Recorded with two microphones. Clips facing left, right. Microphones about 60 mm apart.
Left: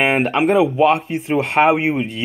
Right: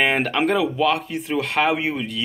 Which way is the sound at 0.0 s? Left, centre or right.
Left.